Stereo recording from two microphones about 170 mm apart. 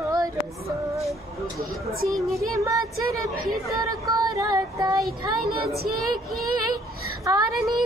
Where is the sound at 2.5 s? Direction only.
20° right (ahead or behind).